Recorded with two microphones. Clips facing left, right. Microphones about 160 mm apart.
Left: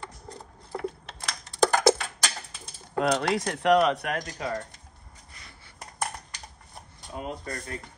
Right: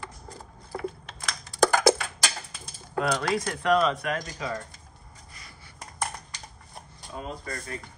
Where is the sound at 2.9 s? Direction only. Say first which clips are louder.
Left 2 dB; 25° left (ahead or behind).